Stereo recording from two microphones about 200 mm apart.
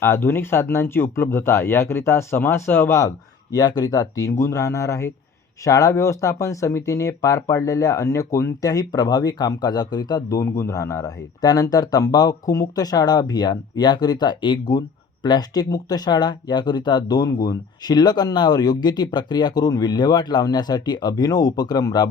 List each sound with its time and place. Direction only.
0.0 s speech: 10° left (ahead or behind)